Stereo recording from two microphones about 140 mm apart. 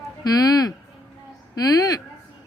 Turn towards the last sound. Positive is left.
turn(degrees=25)  # may be behind; listen again after turning